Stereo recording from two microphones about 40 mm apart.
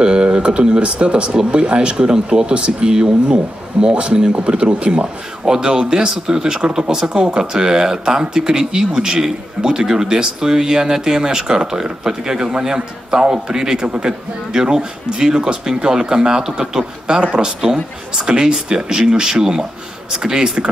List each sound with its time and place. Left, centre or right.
0.0 s a man's voice: right